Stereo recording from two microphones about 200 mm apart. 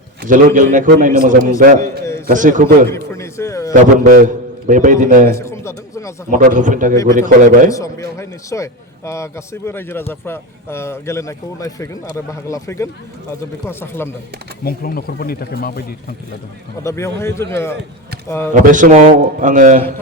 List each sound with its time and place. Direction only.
0.2 s a man's voice: 45° right (ahead or behind)
2.9 s a man's voice: 15° left (ahead or behind)
3.7 s a man's voice: 40° right (ahead or behind)
5.4 s speech: 15° left (ahead or behind)
6.3 s a man's voice: 40° right (ahead or behind)
7.7 s a man's voice: 15° left (ahead or behind)
14.6 s speech: 50° left (ahead or behind)
16.8 s a man's voice: 15° left (ahead or behind)
18.5 s a man's voice: 40° right (ahead or behind)